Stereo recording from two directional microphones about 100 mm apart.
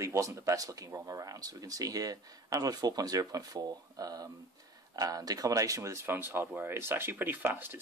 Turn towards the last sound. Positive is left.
turn(degrees=-20)  # may be behind; listen again after turning